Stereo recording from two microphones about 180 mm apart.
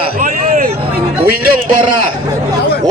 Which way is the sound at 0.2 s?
40° right (ahead or behind).